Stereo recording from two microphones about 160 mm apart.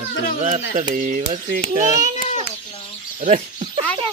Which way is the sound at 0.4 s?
45° right (ahead or behind).